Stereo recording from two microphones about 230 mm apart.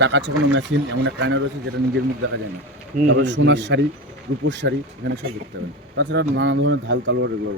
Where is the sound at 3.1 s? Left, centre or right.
Right.